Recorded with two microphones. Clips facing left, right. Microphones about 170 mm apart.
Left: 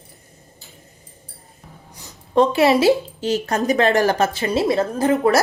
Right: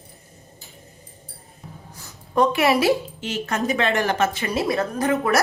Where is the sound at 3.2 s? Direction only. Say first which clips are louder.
Left 5 dB; 35° left (ahead or behind).